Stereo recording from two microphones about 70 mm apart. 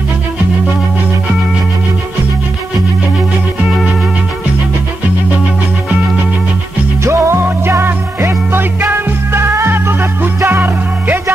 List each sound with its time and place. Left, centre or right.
7.1 s music: right